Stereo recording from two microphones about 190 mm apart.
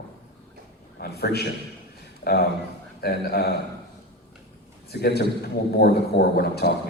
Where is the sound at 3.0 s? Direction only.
55° left (ahead or behind).